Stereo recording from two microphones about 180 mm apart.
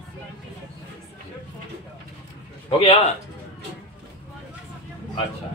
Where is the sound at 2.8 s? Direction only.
35° left (ahead or behind).